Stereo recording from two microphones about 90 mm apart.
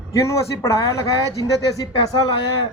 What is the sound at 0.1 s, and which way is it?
Speech, 35° left (ahead or behind).